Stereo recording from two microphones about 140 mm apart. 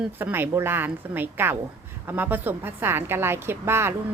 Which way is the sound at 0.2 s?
15° right (ahead or behind).